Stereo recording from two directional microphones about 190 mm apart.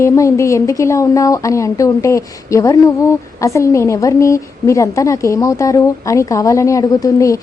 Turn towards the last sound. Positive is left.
turn(degrees=15)  # may be behind; listen again after turning